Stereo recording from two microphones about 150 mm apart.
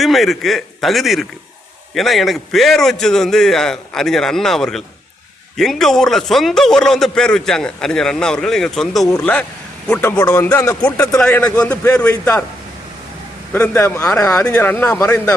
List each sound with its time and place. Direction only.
0.0 s a man's voice: centre (ahead or behind)
9.0 s speech: 10° left (ahead or behind)
11.2 s speech: 5° left (ahead or behind)
13.7 s speech: 20° left (ahead or behind)